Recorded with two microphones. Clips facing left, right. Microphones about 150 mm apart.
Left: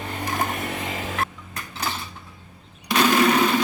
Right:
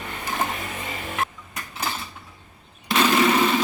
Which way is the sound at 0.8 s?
90° left.